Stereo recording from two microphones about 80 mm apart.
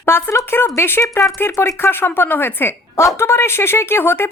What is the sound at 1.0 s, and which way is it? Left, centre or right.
Speech, left.